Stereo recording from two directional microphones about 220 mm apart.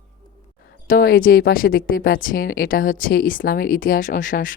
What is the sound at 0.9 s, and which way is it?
Speech, 40° left (ahead or behind).